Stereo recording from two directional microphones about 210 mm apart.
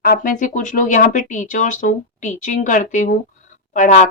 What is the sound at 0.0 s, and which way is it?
Speech, 45° left (ahead or behind).